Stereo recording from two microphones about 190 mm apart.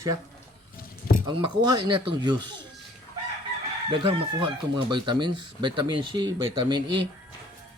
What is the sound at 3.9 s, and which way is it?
Speech, 25° right (ahead or behind).